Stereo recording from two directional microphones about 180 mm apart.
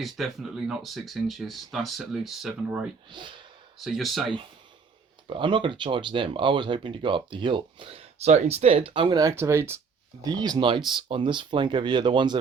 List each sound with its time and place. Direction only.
0.0 s speech: centre (ahead or behind)
3.1 s speech: 25° right (ahead or behind)
3.8 s speech: centre (ahead or behind)
5.3 s speech: 25° right (ahead or behind)